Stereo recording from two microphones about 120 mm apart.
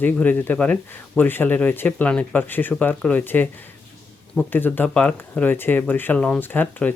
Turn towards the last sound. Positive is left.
turn(degrees=15)  # may be behind; listen again after turning